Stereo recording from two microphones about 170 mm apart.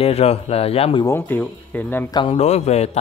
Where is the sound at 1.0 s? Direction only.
15° left (ahead or behind).